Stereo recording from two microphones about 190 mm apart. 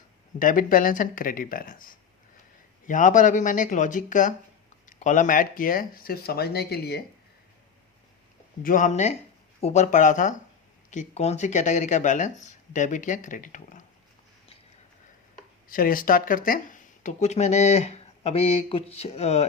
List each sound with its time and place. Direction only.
0.3 s speech: 45° left (ahead or behind)
8.6 s speech: 45° left (ahead or behind)
15.7 s speech: 45° left (ahead or behind)